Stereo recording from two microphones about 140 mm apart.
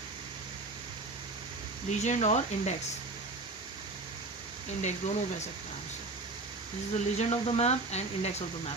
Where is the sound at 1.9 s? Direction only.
55° left (ahead or behind).